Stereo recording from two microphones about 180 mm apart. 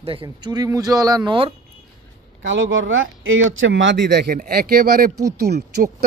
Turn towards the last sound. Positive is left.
turn(degrees=-60)  # may be behind; listen again after turning